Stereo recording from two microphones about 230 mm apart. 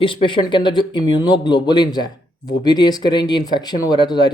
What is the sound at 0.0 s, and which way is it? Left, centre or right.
Speech, left.